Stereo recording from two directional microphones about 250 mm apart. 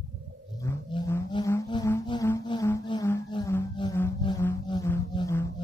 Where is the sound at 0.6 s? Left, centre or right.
Centre.